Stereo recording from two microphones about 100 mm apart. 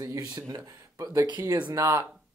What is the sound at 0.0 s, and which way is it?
Speech, 35° right (ahead or behind).